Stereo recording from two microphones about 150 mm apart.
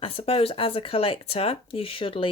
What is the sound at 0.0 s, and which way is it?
Speech, 40° left (ahead or behind).